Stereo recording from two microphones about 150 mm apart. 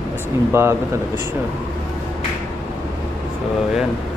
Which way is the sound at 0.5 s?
15° right (ahead or behind).